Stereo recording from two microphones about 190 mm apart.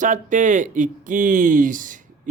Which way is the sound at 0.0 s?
40° right (ahead or behind).